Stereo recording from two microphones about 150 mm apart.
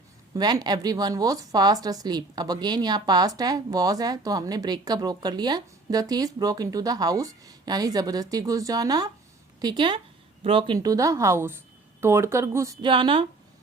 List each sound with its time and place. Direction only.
0.3 s speech: 25° right (ahead or behind)
10.8 s speech: 20° right (ahead or behind)
12.9 s speech: 35° right (ahead or behind)